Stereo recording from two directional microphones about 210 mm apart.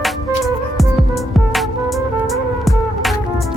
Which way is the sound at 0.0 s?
Centre (ahead or behind).